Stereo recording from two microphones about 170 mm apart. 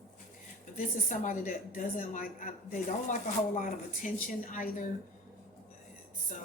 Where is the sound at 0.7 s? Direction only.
50° left (ahead or behind).